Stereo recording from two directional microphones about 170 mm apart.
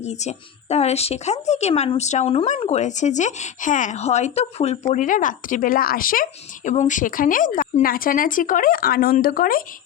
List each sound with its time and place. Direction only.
0.0 s speech: 40° left (ahead or behind)